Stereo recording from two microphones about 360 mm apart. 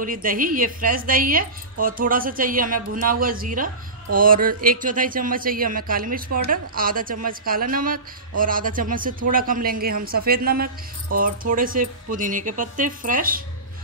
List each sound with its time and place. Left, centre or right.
0.0 s speech: right